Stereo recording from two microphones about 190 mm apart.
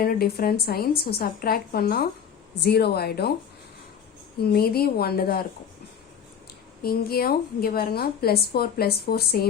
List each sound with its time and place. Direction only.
0.0 s a woman's voice: 50° left (ahead or behind)
4.4 s a woman's voice: 55° left (ahead or behind)
6.8 s a woman's voice: 55° left (ahead or behind)